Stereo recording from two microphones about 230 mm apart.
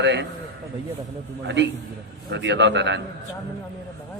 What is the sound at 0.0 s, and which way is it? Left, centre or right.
Speech, right.